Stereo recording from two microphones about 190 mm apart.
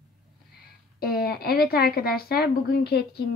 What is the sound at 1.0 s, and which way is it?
A child's voice, 55° left (ahead or behind).